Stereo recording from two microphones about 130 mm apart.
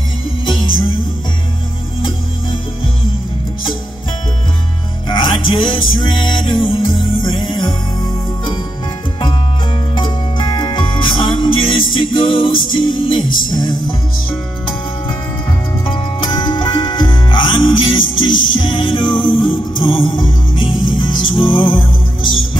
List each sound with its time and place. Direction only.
5.0 s music: 40° left (ahead or behind)
9.9 s music: 35° left (ahead or behind)
15.8 s music: 40° left (ahead or behind)